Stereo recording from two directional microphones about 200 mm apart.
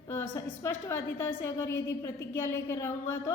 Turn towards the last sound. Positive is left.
turn(degrees=15)  # may be behind; listen again after turning